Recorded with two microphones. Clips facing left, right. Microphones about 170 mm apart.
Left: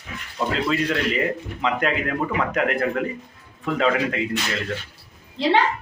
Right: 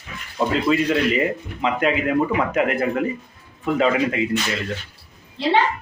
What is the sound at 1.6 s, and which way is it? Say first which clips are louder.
A man's voice: right 3 dB; 5° right (ahead or behind).